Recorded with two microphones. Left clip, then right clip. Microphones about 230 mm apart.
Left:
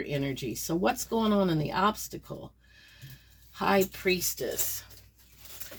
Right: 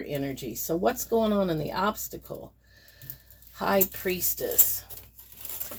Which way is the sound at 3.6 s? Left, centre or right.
Left.